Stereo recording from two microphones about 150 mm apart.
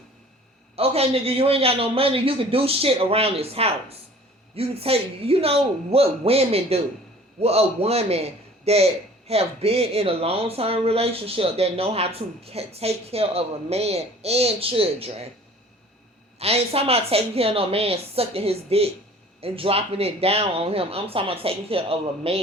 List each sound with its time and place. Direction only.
0.8 s a man's voice: 40° right (ahead or behind)
16.4 s a man's voice: 45° right (ahead or behind)